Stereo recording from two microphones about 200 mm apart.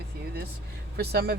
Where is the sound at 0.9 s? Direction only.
50° right (ahead or behind).